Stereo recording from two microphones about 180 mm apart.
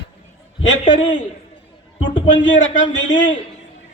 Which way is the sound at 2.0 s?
90° left.